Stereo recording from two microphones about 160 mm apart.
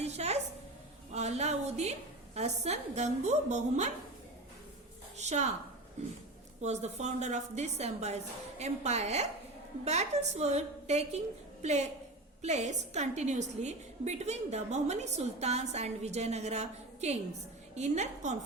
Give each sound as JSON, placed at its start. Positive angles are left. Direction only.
{"t": 0.0, "sound": "a sound", "side_deg": -40}
{"t": 1.1, "sound": "a woman's voice", "side_deg": -45}
{"t": 5.1, "sound": "a woman's voice", "side_deg": -45}
{"t": 6.6, "sound": "a woman's voice", "side_deg": -45}